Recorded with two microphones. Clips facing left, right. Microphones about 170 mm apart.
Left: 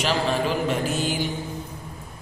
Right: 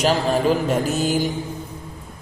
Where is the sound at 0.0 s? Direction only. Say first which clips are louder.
Right 5 dB; 40° right (ahead or behind).